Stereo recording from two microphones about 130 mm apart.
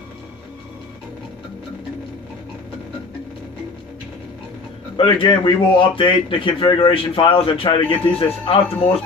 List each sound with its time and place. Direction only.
4.9 s speech: 40° left (ahead or behind)